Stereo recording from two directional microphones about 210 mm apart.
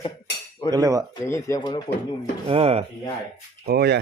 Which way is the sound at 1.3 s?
15° left (ahead or behind).